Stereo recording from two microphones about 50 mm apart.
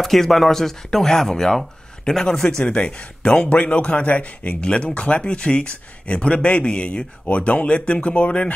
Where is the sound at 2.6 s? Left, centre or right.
Left.